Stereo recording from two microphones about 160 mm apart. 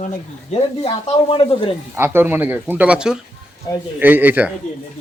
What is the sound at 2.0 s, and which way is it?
Speech, 10° right (ahead or behind).